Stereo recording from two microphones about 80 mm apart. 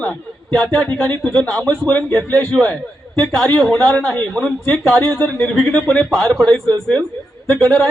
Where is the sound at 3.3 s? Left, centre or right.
Centre.